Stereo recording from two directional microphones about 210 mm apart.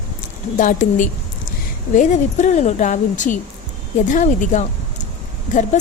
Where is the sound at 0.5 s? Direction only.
35° left (ahead or behind).